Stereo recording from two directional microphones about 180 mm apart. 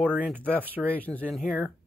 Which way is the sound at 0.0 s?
10° right (ahead or behind).